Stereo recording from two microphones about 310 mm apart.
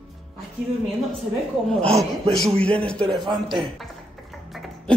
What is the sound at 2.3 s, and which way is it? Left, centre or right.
Speech, centre.